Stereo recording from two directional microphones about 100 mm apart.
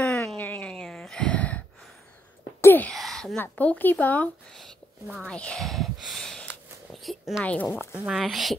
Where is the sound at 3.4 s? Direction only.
15° left (ahead or behind).